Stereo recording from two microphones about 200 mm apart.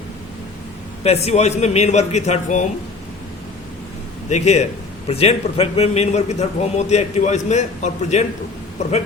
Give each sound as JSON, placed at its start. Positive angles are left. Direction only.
{"t": 1.0, "sound": "a man's voice", "side_deg": 30}
{"t": 4.3, "sound": "a man's voice", "side_deg": 35}